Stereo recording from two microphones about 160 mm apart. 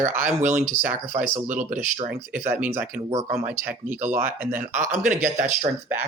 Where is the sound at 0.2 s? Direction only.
50° right (ahead or behind).